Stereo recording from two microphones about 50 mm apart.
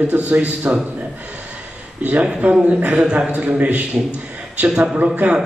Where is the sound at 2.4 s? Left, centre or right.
Right.